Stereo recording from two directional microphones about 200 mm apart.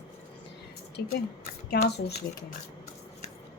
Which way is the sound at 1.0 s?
55° left (ahead or behind).